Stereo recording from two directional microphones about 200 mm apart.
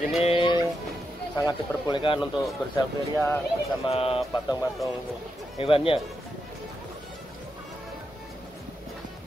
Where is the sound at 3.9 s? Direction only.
30° left (ahead or behind).